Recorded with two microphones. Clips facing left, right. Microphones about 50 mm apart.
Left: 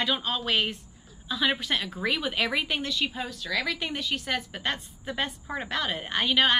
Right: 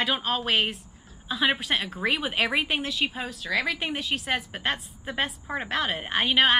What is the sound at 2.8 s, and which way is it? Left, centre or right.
A woman's voice, centre.